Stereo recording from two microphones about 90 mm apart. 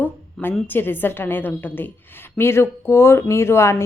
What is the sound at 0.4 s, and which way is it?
Speech, 5° left (ahead or behind).